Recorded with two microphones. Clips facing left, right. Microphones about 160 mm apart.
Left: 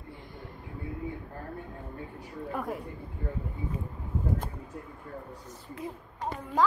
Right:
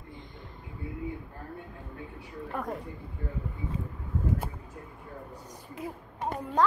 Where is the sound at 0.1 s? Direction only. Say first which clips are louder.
Left 2 dB; 20° right (ahead or behind).